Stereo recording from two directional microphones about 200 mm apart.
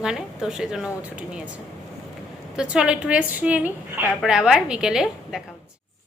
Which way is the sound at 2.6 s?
5° right (ahead or behind).